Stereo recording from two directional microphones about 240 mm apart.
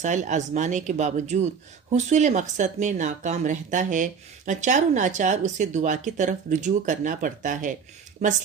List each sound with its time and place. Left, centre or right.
0.0 s speech: right